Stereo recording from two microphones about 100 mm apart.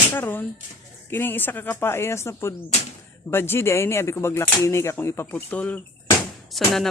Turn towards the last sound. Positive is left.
turn(degrees=0)  # may be behind; listen again after turning